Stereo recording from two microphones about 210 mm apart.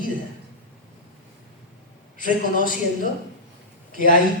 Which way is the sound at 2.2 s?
40° left (ahead or behind).